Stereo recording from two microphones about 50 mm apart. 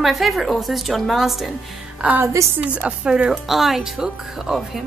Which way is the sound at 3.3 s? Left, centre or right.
Centre.